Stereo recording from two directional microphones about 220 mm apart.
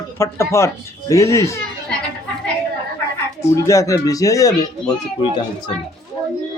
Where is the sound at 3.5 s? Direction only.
15° left (ahead or behind).